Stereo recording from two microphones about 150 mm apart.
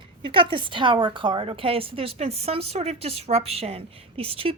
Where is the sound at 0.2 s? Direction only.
35° right (ahead or behind).